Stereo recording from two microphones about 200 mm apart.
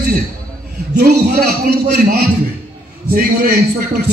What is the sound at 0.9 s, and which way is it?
A man's voice, 55° right (ahead or behind).